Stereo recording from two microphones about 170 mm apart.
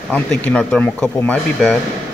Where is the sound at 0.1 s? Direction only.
5° left (ahead or behind).